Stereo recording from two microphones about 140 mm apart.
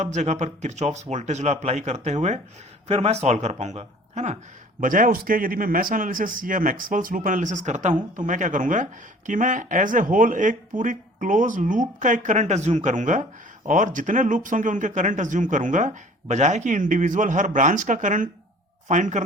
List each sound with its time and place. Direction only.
0.0 s speech: 55° right (ahead or behind)
4.8 s speech: 75° right (ahead or behind)
7.3 s speech: 65° right (ahead or behind)